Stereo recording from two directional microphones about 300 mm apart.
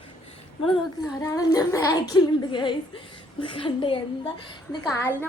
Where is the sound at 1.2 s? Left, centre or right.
Centre.